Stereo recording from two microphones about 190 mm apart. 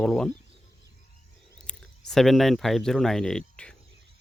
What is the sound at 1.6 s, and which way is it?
Speech, 5° left (ahead or behind).